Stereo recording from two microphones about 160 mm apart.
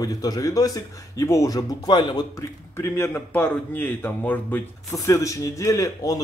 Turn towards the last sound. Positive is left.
turn(degrees=20)  # may be behind; listen again after turning